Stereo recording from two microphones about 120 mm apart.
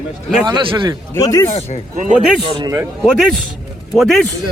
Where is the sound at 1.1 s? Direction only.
25° left (ahead or behind).